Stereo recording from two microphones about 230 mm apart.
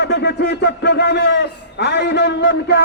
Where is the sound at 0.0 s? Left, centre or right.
Left.